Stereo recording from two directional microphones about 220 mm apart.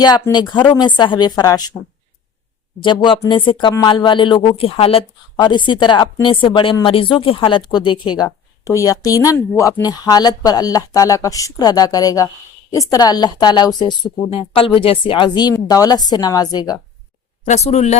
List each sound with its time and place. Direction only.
0.0 s speech: 20° left (ahead or behind)
2.8 s speech: 20° left (ahead or behind)
17.4 s speech: 30° left (ahead or behind)